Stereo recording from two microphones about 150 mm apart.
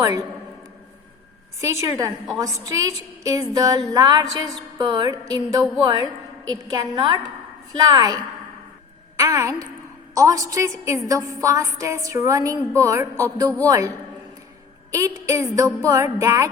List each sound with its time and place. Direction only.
0.0 s speech: 20° right (ahead or behind)
1.6 s a woman's voice: 20° right (ahead or behind)
14.9 s a woman's voice: 20° right (ahead or behind)